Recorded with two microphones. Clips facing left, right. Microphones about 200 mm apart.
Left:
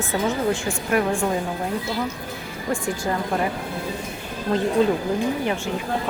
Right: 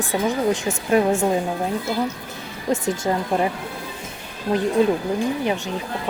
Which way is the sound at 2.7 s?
20° right (ahead or behind).